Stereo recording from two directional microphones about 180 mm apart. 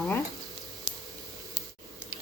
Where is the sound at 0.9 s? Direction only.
20° right (ahead or behind).